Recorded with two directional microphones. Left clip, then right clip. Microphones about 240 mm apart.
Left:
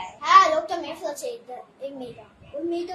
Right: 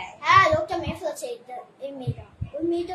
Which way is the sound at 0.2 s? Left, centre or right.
Centre.